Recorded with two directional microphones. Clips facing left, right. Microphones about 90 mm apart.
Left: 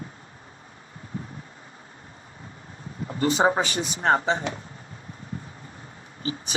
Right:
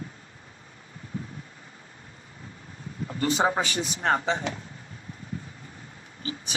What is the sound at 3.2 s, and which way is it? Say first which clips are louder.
Speech: left 3 dB; 25° left (ahead or behind).